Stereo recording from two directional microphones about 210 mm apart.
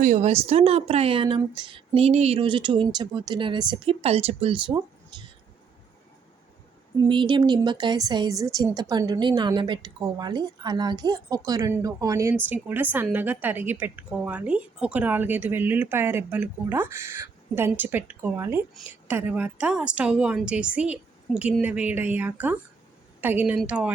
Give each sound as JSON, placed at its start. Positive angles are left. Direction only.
{"t": 0.0, "sound": "speech", "side_deg": -35}
{"t": 7.0, "sound": "a woman's voice", "side_deg": -20}